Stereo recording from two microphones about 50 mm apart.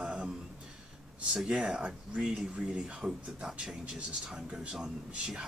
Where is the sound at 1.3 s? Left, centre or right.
Centre.